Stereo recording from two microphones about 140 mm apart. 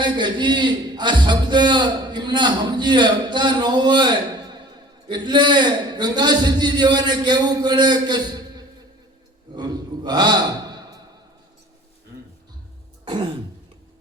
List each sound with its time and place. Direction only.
0.0 s a man's voice: 35° right (ahead or behind)